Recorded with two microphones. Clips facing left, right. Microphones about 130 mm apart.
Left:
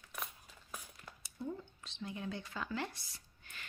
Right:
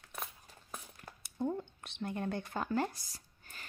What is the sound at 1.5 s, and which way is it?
Speech, 60° right (ahead or behind).